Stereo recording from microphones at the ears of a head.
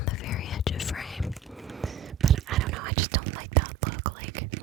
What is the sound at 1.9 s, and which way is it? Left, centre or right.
Whispering, right.